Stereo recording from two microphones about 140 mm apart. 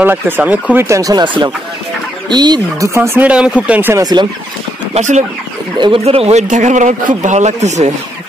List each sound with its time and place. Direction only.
0.0 s speech: 10° right (ahead or behind); by 2.9 s 30° right (ahead or behind)
2.9 s speech: 20° right (ahead or behind)
3.3 s speech: 10° right (ahead or behind)
3.9 s speech: 30° right (ahead or behind)
4.9 s speech: 55° right (ahead or behind)
5.8 s speech: 40° right (ahead or behind)
6.4 s speech: 60° right (ahead or behind)